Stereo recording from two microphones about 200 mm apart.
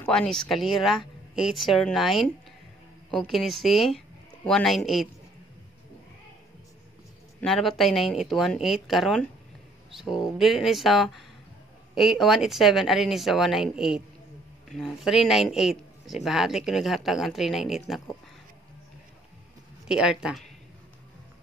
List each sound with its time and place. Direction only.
0.0 s speech: 5° left (ahead or behind)
7.3 s speech: centre (ahead or behind)
19.9 s speech: 5° right (ahead or behind)